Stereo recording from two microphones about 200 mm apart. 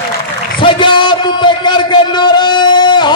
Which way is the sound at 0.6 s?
25° left (ahead or behind).